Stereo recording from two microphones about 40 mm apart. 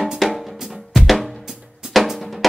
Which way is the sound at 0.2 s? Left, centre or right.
Centre.